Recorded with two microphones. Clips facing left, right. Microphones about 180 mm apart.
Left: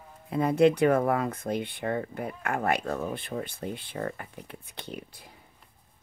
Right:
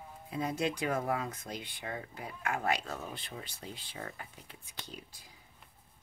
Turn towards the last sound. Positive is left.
turn(degrees=60)  # may be behind; listen again after turning